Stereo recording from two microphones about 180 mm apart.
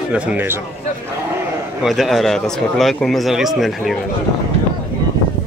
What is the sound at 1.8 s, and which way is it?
Speech, centre (ahead or behind).